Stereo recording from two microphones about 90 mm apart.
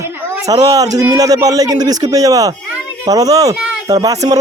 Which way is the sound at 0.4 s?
40° right (ahead or behind).